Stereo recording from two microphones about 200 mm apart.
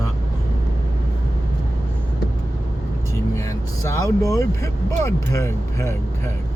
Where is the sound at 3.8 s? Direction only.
15° left (ahead or behind).